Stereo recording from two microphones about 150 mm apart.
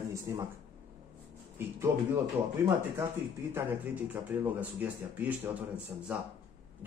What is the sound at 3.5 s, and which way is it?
A man's voice, 10° right (ahead or behind).